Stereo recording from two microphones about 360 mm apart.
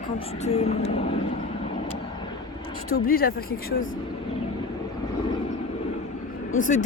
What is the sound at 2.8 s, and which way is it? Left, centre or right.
Speech, left.